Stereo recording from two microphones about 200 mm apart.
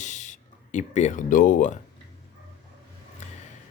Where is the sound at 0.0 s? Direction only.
40° left (ahead or behind).